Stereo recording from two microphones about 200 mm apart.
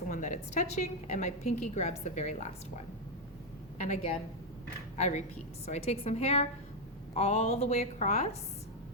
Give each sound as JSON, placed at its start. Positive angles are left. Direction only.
{"t": 0.1, "sound": "a woman's voice", "side_deg": 40}
{"t": 3.8, "sound": "a woman's voice", "side_deg": 35}